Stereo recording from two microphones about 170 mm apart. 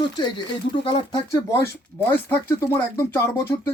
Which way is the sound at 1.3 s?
15° left (ahead or behind).